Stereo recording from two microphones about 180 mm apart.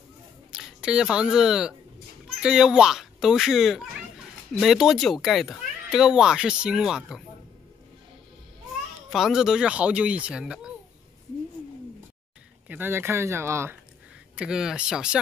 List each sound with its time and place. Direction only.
0.5 s speech: 5° right (ahead or behind)
9.1 s speech: centre (ahead or behind)
12.6 s speech: 10° right (ahead or behind)